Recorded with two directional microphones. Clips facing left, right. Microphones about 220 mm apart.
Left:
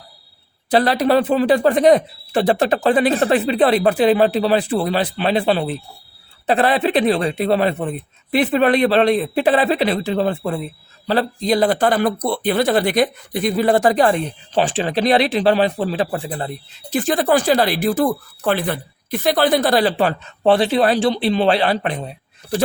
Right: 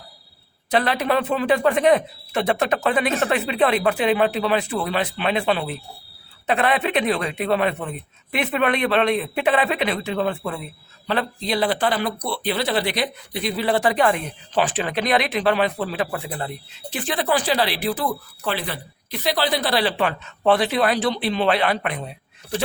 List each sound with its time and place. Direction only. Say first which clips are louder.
0.7 s speech: left 5 dB; 35° left (ahead or behind)
16.9 s speech: left 6 dB; 45° left (ahead or behind)